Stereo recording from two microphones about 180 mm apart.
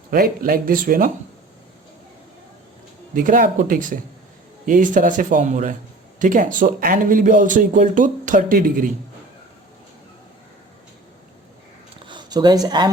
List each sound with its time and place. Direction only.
0.1 s speech: 55° right (ahead or behind)
3.2 s speech: 50° right (ahead or behind)
12.0 s speech: 25° right (ahead or behind)